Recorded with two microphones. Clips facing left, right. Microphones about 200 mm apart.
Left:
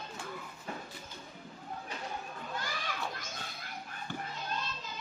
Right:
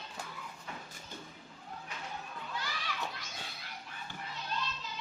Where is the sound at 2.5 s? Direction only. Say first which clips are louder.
Left 2 dB; 45° left (ahead or behind).